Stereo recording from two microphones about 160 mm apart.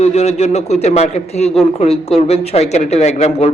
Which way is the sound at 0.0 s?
40° left (ahead or behind).